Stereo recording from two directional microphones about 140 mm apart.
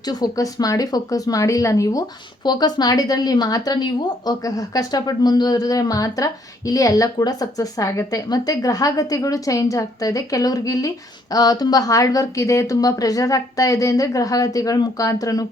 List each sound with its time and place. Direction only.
0.0 s speech: 30° left (ahead or behind)